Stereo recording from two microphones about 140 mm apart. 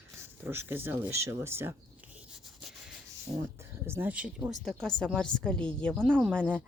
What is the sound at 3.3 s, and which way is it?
Speech, 20° right (ahead or behind).